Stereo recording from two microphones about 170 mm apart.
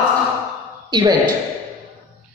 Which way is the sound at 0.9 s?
25° right (ahead or behind).